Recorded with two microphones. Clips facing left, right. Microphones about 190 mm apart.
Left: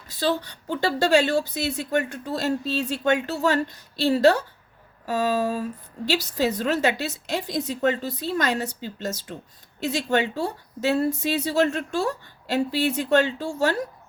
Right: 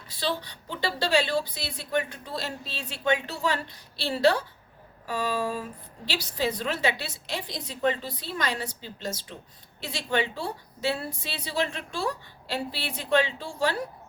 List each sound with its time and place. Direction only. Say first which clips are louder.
0.1 s speech: left 6 dB; 45° left (ahead or behind)